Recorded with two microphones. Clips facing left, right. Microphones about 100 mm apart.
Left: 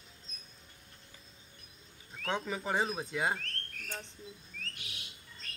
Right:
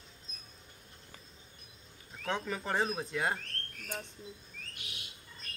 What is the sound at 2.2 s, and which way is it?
Speech, 5° left (ahead or behind).